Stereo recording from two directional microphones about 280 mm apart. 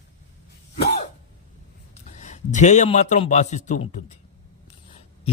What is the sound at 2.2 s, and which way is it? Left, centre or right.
Speech, left.